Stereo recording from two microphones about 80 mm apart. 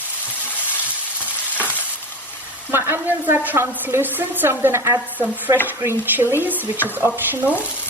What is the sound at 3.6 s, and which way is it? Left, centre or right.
Stir, right.